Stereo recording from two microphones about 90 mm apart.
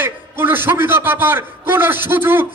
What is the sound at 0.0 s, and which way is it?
A man's voice, 25° right (ahead or behind).